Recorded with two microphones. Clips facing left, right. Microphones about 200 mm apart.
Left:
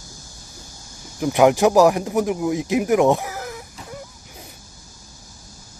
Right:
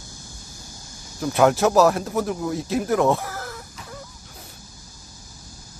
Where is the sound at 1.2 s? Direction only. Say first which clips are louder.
Left 3 dB; 15° left (ahead or behind).